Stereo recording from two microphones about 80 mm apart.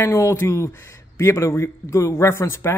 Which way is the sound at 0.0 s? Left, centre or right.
Left.